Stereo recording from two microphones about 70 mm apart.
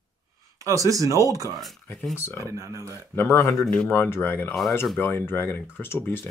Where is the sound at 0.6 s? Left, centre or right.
Right.